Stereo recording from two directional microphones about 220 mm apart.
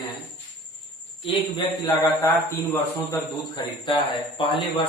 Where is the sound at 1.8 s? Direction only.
15° left (ahead or behind).